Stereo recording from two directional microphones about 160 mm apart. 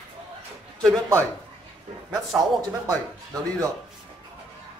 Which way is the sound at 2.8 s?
20° right (ahead or behind).